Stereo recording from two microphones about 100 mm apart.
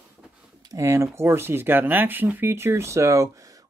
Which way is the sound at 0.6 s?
30° right (ahead or behind).